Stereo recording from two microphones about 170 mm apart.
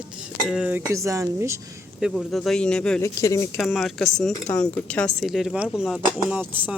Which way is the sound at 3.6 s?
Centre (ahead or behind).